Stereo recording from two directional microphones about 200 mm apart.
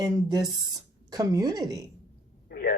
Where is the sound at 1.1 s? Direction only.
20° right (ahead or behind).